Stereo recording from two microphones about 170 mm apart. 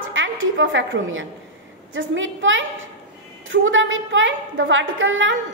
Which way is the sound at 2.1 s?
90° right.